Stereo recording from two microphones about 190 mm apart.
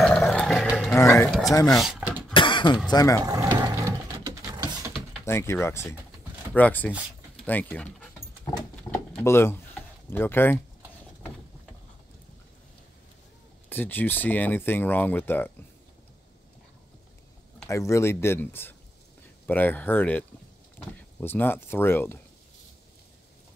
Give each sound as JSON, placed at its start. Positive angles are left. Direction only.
{"t": 0.0, "sound": "roar", "side_deg": 5}
{"t": 0.9, "sound": "speech", "side_deg": 15}
{"t": 1.7, "sound": "a sound", "side_deg": 0}
{"t": 2.3, "sound": "cough", "side_deg": 25}
{"t": 2.9, "sound": "speech", "side_deg": 20}
{"t": 3.2, "sound": "sewing machine", "side_deg": -15}
{"t": 5.2, "sound": "speech", "side_deg": 15}
{"t": 6.9, "sound": "a sound", "side_deg": -5}
{"t": 9.2, "sound": "speech", "side_deg": 15}
{"t": 13.7, "sound": "speech", "side_deg": 10}
{"t": 17.6, "sound": "speech", "side_deg": 15}